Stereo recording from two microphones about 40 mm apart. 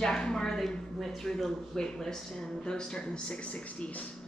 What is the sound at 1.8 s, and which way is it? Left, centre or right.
A woman's voice, centre.